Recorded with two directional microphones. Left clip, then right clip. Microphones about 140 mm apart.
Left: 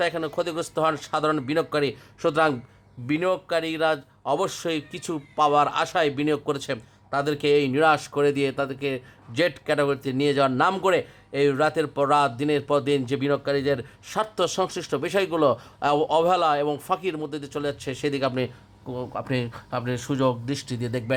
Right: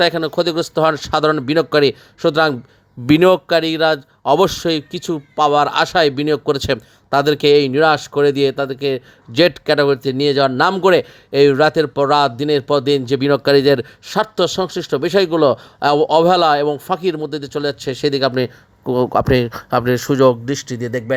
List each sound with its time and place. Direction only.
0.0 s speech: 45° right (ahead or behind)
2.2 s speech: 30° right (ahead or behind)
3.1 s speech: 70° right (ahead or behind)
3.5 s speech: 40° right (ahead or behind)
6.7 s speech: 55° right (ahead or behind)
14.1 s speech: 35° right (ahead or behind)
18.9 s speech: 70° right (ahead or behind); by 21.0 s 25° right (ahead or behind)